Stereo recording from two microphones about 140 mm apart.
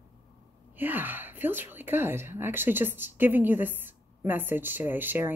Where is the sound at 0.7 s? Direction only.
15° right (ahead or behind).